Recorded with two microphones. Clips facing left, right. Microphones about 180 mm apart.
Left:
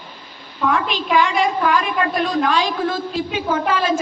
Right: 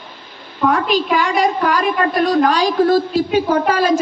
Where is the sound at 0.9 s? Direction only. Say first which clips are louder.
Right 2 dB; 40° right (ahead or behind).